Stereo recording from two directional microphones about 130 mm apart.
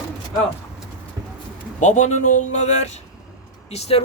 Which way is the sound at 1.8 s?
65° left (ahead or behind).